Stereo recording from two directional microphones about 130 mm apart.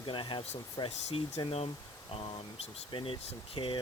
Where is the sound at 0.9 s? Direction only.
55° left (ahead or behind).